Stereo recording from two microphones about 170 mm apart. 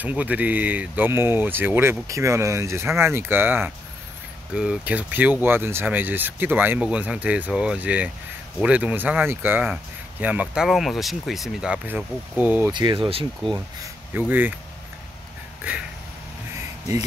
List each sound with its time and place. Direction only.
0.0 s speech: 10° right (ahead or behind)
12.7 s speech: 30° right (ahead or behind)
14.1 s speech: 10° right (ahead or behind)